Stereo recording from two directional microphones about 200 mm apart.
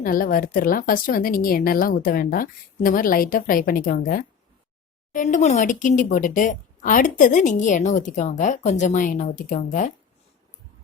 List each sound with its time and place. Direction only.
0.0 s a woman's voice: 45° left (ahead or behind)